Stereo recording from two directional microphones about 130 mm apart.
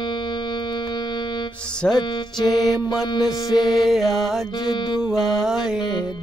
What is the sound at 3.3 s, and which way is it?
Music, 30° left (ahead or behind).